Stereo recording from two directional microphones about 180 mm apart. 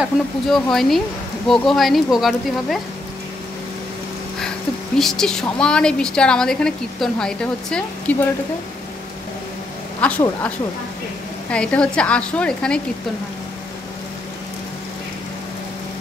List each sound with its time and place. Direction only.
0.0 s a woman's voice: centre (ahead or behind)
4.9 s a woman's voice: centre (ahead or behind)
10.0 s speech: 5° left (ahead or behind)
11.5 s a woman's voice: 5° left (ahead or behind)